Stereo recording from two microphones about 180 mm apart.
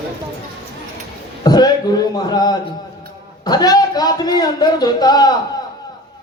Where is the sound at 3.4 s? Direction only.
20° left (ahead or behind).